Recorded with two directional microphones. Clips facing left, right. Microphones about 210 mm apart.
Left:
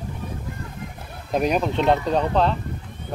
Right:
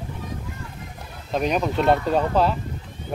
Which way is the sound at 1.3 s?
10° left (ahead or behind).